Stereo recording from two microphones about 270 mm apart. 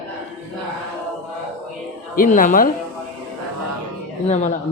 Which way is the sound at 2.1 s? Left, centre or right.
Left.